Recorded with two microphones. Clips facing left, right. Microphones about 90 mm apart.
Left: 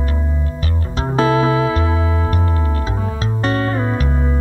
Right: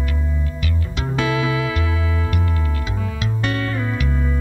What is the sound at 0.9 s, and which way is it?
Music, 35° left (ahead or behind).